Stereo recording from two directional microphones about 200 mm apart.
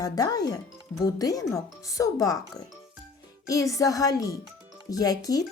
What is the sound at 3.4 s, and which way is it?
Speech, 15° left (ahead or behind).